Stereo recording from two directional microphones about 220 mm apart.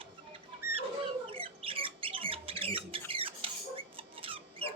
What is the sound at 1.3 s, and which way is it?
Bird, 25° right (ahead or behind).